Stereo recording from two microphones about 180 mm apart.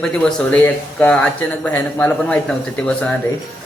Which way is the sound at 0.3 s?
5° left (ahead or behind).